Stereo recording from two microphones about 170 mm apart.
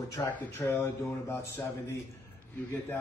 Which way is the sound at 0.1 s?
15° left (ahead or behind).